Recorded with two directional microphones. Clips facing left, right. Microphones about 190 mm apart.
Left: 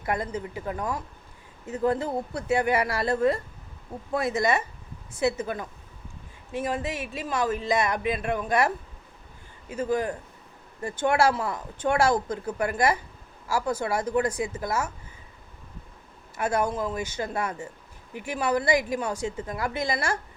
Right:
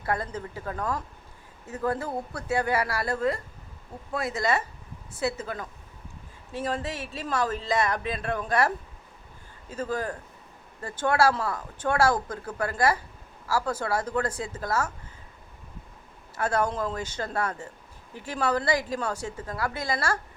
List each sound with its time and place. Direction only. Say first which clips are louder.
0.0 s speech: left 1 dB; 15° left (ahead or behind)
16.4 s speech: left 1 dB; 10° left (ahead or behind)